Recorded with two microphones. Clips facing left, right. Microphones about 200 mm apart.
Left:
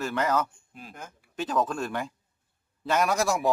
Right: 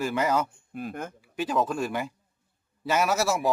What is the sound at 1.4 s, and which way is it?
A man's voice, 10° right (ahead or behind).